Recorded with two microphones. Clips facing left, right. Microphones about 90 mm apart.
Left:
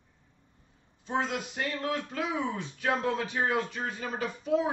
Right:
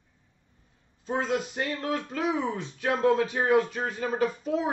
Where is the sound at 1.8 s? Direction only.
25° right (ahead or behind).